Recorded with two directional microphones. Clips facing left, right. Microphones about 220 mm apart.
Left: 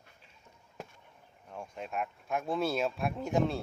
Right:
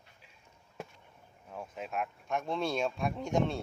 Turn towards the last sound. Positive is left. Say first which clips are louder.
# left 1 dB
turn(degrees=0)  # may be behind; listen again after turning